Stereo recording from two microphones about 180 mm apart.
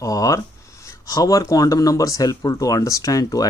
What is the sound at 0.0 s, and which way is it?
Speech, 20° left (ahead or behind).